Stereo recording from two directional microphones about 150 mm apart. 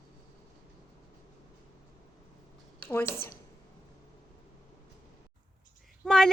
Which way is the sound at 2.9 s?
15° left (ahead or behind).